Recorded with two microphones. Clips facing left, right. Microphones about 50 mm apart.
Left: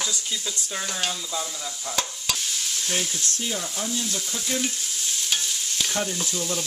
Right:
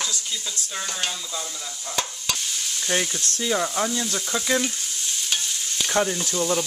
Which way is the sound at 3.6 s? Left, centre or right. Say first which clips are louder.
Right 6 dB; right.